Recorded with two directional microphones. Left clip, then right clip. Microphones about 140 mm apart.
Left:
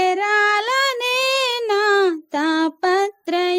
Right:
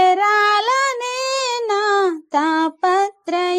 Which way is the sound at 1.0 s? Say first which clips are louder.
Left 2 dB; 30° left (ahead or behind).